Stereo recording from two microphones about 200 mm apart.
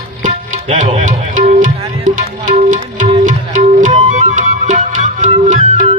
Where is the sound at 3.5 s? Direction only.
40° right (ahead or behind).